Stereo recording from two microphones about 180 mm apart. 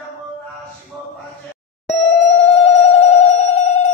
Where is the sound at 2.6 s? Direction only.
35° left (ahead or behind).